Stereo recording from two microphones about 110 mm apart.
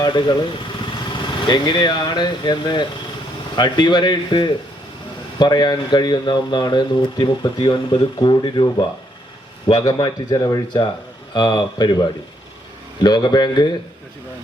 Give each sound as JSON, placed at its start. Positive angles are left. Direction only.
{"t": 0.0, "sound": "speech", "side_deg": 45}
{"t": 9.7, "sound": "speech", "side_deg": 35}